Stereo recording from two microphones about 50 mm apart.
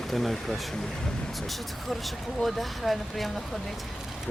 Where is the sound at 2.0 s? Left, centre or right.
Centre.